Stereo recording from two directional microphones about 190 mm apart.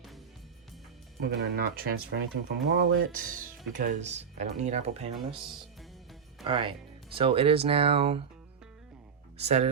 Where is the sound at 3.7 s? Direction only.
40° right (ahead or behind).